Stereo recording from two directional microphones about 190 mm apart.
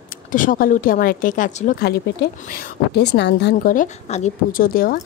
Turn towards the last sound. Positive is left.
turn(degrees=50)  # may be behind; listen again after turning